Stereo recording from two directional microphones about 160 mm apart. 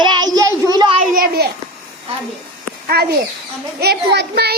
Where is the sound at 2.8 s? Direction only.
80° right.